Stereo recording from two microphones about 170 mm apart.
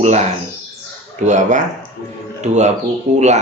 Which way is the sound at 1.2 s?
45° right (ahead or behind).